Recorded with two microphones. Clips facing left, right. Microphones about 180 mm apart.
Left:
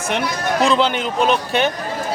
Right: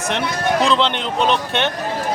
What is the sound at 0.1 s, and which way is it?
A man's voice, 5° left (ahead or behind).